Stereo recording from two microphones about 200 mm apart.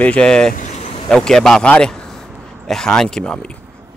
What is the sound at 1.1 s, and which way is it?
A man's voice, 5° left (ahead or behind).